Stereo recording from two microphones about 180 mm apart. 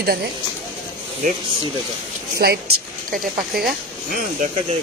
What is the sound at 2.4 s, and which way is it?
Speech, 60° right (ahead or behind).